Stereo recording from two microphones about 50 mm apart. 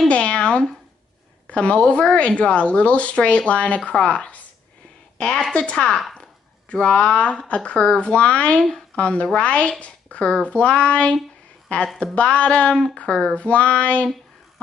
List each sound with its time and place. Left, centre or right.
0.1 s a sound: left
1.5 s a woman's voice: left
5.5 s a woman's voice: left